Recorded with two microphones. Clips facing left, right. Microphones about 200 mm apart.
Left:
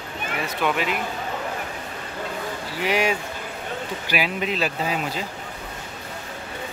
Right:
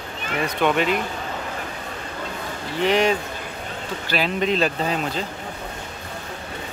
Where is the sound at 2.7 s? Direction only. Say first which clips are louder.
Right 4 dB; 10° left (ahead or behind).